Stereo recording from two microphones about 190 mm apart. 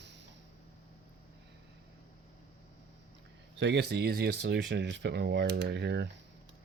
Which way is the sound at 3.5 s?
65° right (ahead or behind).